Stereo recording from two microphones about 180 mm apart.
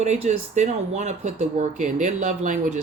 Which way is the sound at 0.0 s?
40° right (ahead or behind).